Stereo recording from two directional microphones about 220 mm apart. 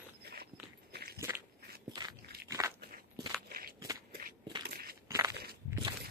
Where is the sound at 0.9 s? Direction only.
45° right (ahead or behind).